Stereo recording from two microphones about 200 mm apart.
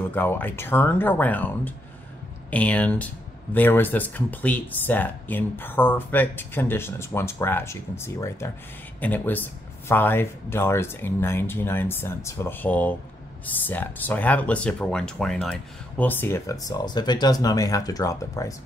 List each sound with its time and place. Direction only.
0.1 s speech: 10° left (ahead or behind)